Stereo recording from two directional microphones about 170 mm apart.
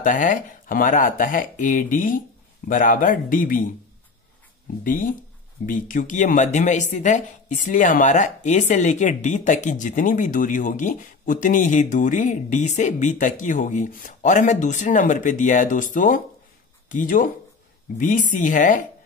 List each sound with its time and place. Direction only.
0.0 s speech: 50° left (ahead or behind)
4.8 s speech: 55° left (ahead or behind)